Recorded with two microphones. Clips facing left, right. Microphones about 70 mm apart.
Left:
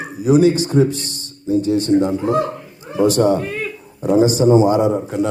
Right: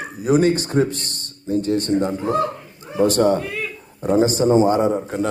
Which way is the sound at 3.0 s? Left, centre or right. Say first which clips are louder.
Left 2 dB; right.